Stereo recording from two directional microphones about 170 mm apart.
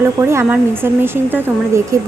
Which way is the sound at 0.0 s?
15° right (ahead or behind).